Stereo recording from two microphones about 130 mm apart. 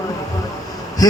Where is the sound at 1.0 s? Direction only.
30° left (ahead or behind).